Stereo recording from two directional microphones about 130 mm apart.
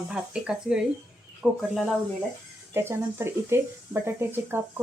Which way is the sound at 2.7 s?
20° right (ahead or behind).